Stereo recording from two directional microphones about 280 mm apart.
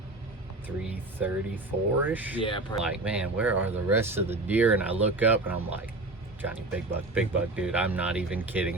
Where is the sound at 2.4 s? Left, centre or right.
Centre.